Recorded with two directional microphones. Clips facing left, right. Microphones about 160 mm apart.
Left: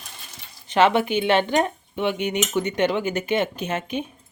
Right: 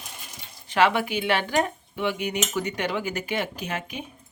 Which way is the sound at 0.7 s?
25° left (ahead or behind).